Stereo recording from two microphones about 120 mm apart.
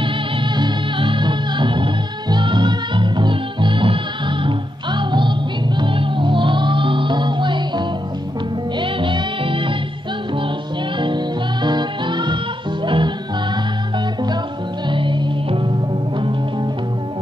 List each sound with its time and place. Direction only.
0.6 s music: 45° right (ahead or behind)
11.0 s music: 40° right (ahead or behind)